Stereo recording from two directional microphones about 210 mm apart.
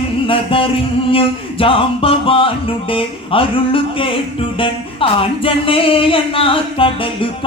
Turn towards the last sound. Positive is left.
turn(degrees=25)  # may be behind; listen again after turning